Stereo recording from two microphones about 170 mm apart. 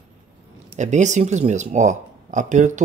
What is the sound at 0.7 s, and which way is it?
Speech, 45° right (ahead or behind).